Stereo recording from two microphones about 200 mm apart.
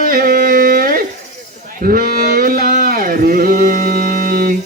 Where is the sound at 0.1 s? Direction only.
45° right (ahead or behind).